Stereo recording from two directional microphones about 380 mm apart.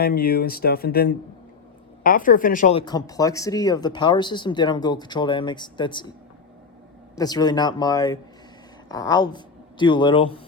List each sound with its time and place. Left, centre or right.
0.0 s speech: left
7.2 s speech: centre